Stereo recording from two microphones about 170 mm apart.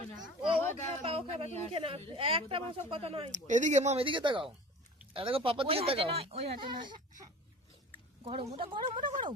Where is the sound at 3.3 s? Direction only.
45° right (ahead or behind); by 7.3 s 25° right (ahead or behind).